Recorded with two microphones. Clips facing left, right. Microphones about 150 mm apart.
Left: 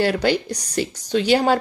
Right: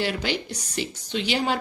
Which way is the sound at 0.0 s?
45° left (ahead or behind).